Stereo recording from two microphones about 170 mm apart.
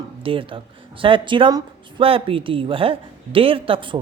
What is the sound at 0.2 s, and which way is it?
Speech, 30° right (ahead or behind).